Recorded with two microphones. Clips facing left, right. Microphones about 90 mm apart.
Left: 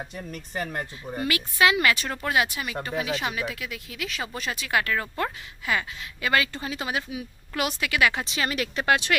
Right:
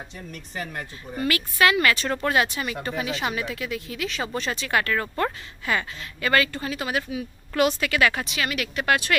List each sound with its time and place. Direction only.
1.1 s speech: 15° left (ahead or behind)
8.3 s speech: 30° left (ahead or behind)
8.8 s speech: 20° left (ahead or behind)